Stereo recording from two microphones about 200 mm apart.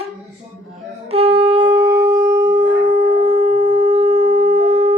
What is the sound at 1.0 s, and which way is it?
Wind instrument, 30° right (ahead or behind).